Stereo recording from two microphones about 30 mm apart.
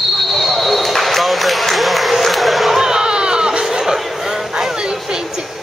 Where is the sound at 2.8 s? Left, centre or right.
Right.